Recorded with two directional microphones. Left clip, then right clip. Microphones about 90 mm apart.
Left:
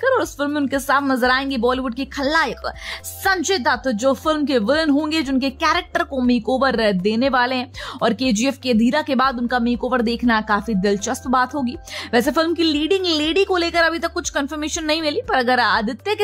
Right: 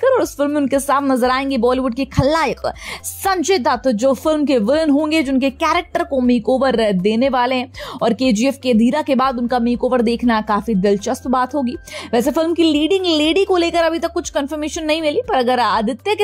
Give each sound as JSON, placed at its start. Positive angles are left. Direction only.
{"t": 0.0, "sound": "a woman's voice", "side_deg": -25}
{"t": 6.1, "sound": "a woman's voice", "side_deg": -20}